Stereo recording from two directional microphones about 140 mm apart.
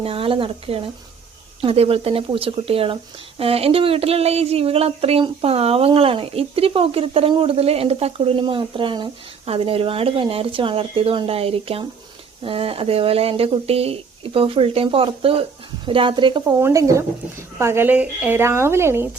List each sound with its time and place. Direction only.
0.0 s speech: 40° right (ahead or behind)
16.6 s a woman's voice: 20° right (ahead or behind)